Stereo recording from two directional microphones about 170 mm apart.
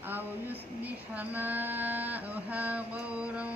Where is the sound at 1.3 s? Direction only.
10° right (ahead or behind).